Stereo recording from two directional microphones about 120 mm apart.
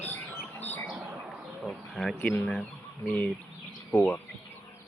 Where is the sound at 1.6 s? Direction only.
Centre (ahead or behind).